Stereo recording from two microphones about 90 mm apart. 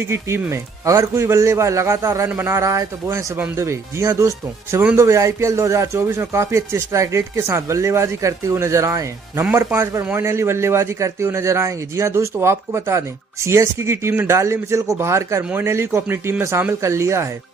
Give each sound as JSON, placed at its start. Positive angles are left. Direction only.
{"t": 0.1, "sound": "a man's voice", "side_deg": -30}